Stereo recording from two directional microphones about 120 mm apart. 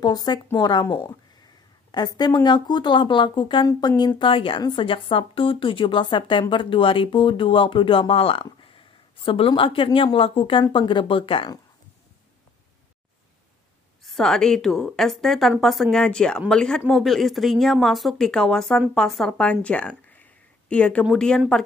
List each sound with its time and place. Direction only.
0.0 s speech: 35° left (ahead or behind)
1.9 s a woman's voice: 35° left (ahead or behind)
4.2 s a woman's voice: 50° left (ahead or behind)
14.0 s speech: 5° left (ahead or behind)